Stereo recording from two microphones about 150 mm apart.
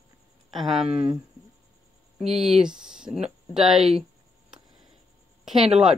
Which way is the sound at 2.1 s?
Centre (ahead or behind).